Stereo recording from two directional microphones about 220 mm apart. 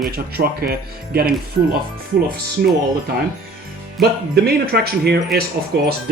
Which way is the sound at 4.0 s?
45° right (ahead or behind).